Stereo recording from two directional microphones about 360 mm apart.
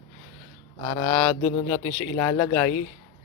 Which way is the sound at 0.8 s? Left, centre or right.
Centre.